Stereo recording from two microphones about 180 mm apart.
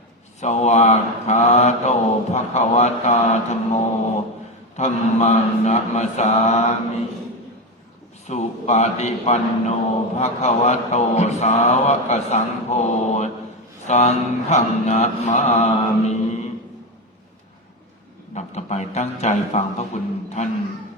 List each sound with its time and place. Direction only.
0.3 s mantra: 40° left (ahead or behind)
4.8 s mantra: 40° left (ahead or behind)
8.3 s mantra: 40° left (ahead or behind)
18.3 s mantra: 40° left (ahead or behind)